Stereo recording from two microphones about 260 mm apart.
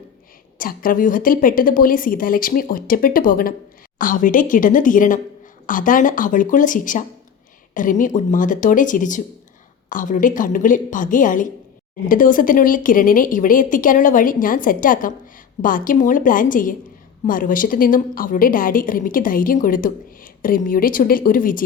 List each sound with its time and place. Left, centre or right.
0.6 s a woman's voice: left